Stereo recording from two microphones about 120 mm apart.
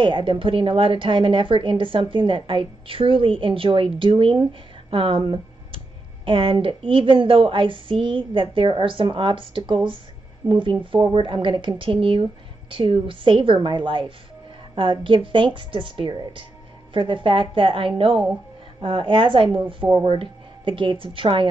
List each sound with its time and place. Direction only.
0.0 s a woman's voice: 45° right (ahead or behind)